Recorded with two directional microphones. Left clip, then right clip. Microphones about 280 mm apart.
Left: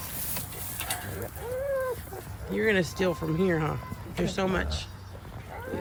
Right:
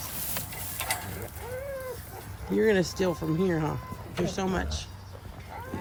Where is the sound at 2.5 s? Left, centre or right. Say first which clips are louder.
Right 1 dB; centre.